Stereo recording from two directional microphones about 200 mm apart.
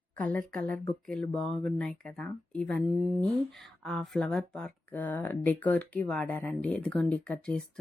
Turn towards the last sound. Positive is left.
turn(degrees=5)  # may be behind; listen again after turning